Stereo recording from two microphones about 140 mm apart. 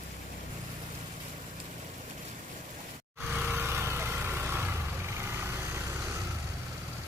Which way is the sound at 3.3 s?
15° right (ahead or behind).